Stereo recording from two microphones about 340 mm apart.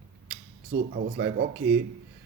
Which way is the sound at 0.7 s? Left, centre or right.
Right.